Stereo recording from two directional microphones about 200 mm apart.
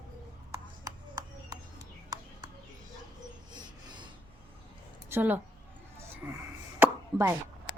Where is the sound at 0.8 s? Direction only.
20° right (ahead or behind).